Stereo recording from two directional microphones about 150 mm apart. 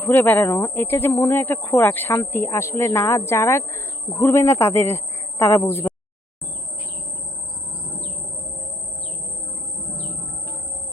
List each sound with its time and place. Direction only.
0.0 s speech: 10° left (ahead or behind)